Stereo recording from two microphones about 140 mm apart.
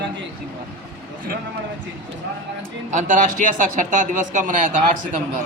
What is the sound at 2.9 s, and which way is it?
Speech, 65° right (ahead or behind).